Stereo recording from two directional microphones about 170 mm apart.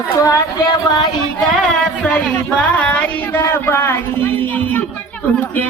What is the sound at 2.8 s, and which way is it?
Speech, 10° left (ahead or behind).